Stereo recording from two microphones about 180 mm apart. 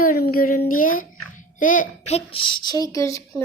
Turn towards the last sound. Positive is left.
turn(degrees=15)  # may be behind; listen again after turning